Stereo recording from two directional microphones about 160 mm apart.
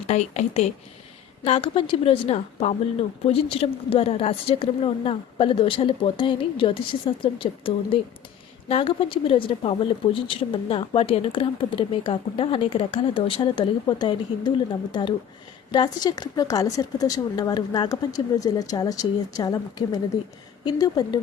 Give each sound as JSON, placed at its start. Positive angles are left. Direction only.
{"t": 0.1, "sound": "a woman's voice", "side_deg": 45}